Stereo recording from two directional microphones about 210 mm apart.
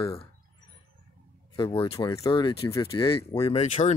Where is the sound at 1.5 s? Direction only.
25° left (ahead or behind).